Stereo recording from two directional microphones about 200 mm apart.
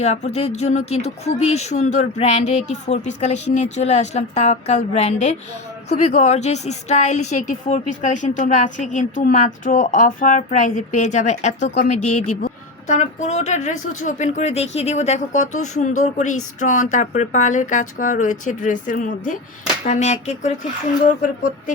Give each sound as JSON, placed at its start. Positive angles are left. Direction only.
{"t": 0.0, "sound": "a woman's voice", "side_deg": 35}
{"t": 12.9, "sound": "a woman's voice", "side_deg": 35}